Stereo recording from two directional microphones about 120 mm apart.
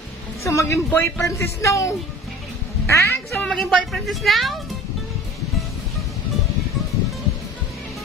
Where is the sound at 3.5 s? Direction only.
5° left (ahead or behind).